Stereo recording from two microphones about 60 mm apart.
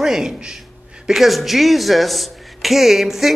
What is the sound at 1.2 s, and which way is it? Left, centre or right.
A woman's voice, centre.